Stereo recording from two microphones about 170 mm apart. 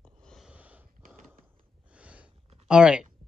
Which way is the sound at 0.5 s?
10° right (ahead or behind).